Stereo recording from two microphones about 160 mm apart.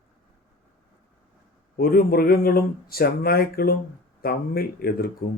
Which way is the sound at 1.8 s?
70° left (ahead or behind).